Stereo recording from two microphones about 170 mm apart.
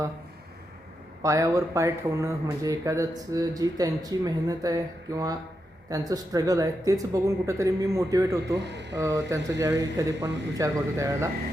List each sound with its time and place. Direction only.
1.2 s speech: 20° right (ahead or behind)
8.5 s speech: 90° right
9.0 s speech: 20° right (ahead or behind)